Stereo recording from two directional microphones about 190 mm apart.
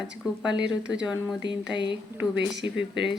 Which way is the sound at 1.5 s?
70° right (ahead or behind).